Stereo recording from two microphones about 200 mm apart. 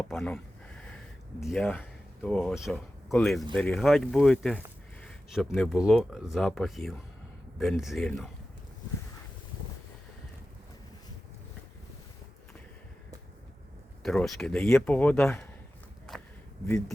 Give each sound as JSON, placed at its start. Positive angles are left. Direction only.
{"t": 0.0, "sound": "speech", "side_deg": 5}
{"t": 1.5, "sound": "speech", "side_deg": 5}
{"t": 14.0, "sound": "speech", "side_deg": 0}
{"t": 16.1, "sound": "a sound", "side_deg": 0}